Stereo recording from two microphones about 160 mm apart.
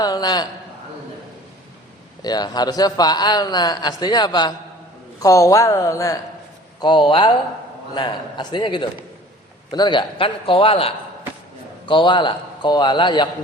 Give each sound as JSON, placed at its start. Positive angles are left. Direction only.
{"t": 0.0, "sound": "a man's voice", "side_deg": 25}
{"t": 2.2, "sound": "a man's voice", "side_deg": 25}